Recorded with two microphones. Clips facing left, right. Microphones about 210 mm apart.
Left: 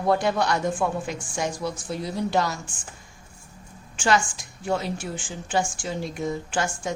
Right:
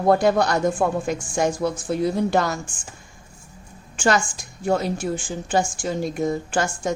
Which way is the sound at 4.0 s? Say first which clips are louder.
Right 2 dB; 45° right (ahead or behind).